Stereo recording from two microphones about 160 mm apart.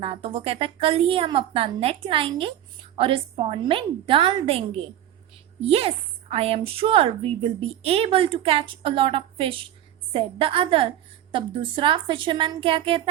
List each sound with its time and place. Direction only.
0.0 s a woman's voice: 35° right (ahead or behind)